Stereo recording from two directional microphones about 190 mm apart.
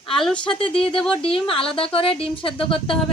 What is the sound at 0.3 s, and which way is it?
A woman's voice, 25° left (ahead or behind).